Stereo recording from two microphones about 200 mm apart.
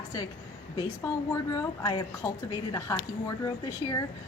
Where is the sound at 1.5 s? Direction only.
20° left (ahead or behind).